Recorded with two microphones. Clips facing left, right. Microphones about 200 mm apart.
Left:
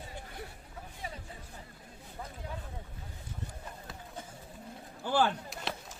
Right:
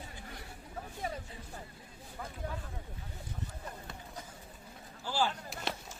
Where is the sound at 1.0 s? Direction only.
50° right (ahead or behind).